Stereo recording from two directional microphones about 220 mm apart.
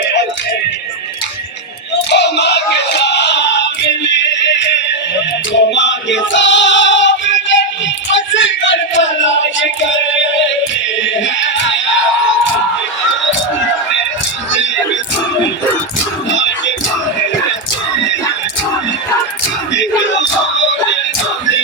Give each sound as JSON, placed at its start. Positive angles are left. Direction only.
{"t": 2.0, "sound": "music", "side_deg": 50}
{"t": 5.5, "sound": "choir", "side_deg": 55}
{"t": 8.1, "sound": "a sound", "side_deg": 55}
{"t": 11.0, "sound": "music", "side_deg": 55}
{"t": 16.3, "sound": "music", "side_deg": 55}
{"t": 19.7, "sound": "music", "side_deg": 55}